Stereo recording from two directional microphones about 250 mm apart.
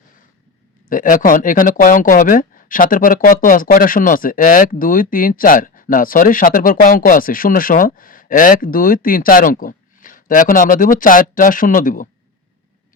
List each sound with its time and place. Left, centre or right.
0.9 s speech: left